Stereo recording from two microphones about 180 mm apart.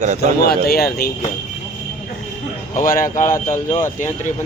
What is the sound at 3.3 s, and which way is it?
Speech, 15° left (ahead or behind).